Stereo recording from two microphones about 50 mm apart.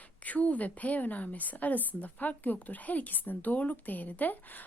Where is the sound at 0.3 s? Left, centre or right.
Left.